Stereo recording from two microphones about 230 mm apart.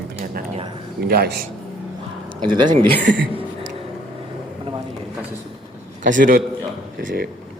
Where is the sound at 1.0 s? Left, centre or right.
Right.